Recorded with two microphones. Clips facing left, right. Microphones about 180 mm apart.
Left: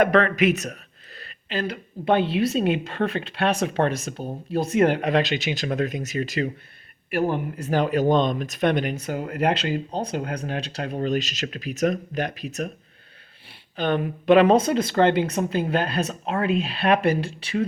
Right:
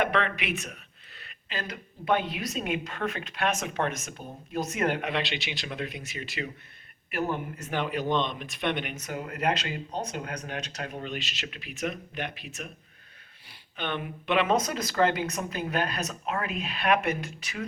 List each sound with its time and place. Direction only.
0.0 s speech: 40° left (ahead or behind)